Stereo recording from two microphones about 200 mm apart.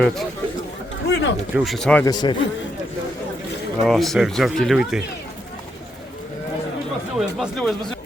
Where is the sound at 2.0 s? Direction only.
20° left (ahead or behind).